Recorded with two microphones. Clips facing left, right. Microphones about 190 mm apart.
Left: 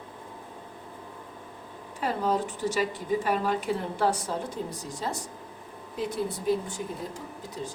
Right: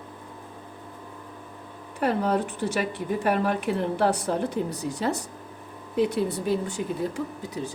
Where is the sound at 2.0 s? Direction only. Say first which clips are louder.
Right 3 dB; 65° right (ahead or behind).